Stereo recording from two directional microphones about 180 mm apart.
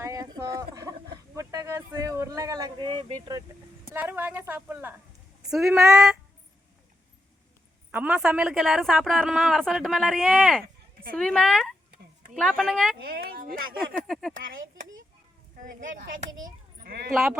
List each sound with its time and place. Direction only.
0.0 s a sound: 20° right (ahead or behind)
3.9 s a sound: 10° right (ahead or behind)
5.9 s speech: 5° right (ahead or behind)
7.9 s speech: 5° right (ahead or behind)
13.0 s speech: 60° right (ahead or behind)
14.1 s speech: centre (ahead or behind)
14.3 s speech: 50° right (ahead or behind)
16.8 s speech: 60° right (ahead or behind)